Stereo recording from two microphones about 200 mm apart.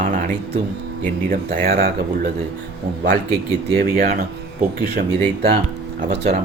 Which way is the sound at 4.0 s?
45° right (ahead or behind).